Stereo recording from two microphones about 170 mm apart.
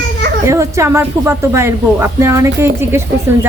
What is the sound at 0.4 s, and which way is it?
A woman's voice, 15° right (ahead or behind).